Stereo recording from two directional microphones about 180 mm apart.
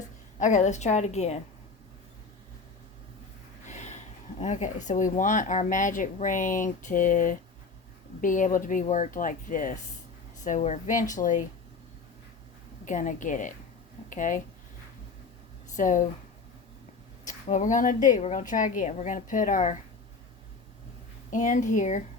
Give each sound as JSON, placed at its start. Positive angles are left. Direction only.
{"t": 0.3, "sound": "a woman's voice", "side_deg": 45}
{"t": 3.7, "sound": "a woman's voice", "side_deg": 40}
{"t": 12.8, "sound": "a woman's voice", "side_deg": 45}
{"t": 15.7, "sound": "speech", "side_deg": 45}
{"t": 17.2, "sound": "a woman's voice", "side_deg": 45}
{"t": 21.2, "sound": "a woman's voice", "side_deg": 45}